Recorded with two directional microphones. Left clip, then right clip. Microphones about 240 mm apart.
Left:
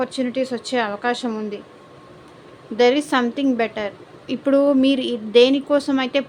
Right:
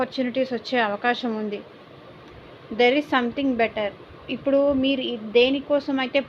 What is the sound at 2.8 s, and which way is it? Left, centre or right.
A woman's voice, centre.